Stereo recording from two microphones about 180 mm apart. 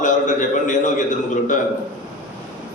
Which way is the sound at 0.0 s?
45° left (ahead or behind).